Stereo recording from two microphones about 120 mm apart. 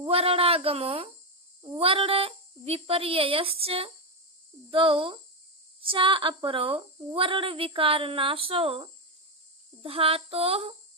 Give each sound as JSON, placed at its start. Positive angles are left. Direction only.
{"t": 0.0, "sound": "a child's voice", "side_deg": -55}